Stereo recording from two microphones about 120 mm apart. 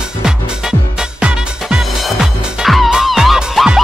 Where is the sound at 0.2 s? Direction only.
5° right (ahead or behind).